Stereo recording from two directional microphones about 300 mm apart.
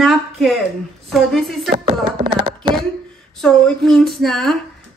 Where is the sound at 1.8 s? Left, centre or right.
Centre.